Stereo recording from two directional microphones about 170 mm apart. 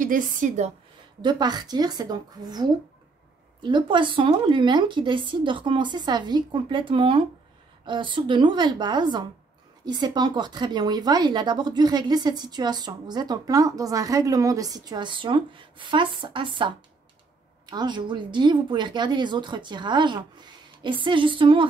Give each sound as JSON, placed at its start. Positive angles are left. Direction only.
{"t": 0.0, "sound": "a woman's voice", "side_deg": -50}
{"t": 1.2, "sound": "speech", "side_deg": -25}